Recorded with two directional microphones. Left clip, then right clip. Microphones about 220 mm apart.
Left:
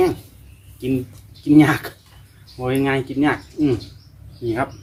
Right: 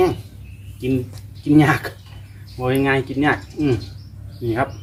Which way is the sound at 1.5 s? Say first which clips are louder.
Left 1 dB; 10° left (ahead or behind).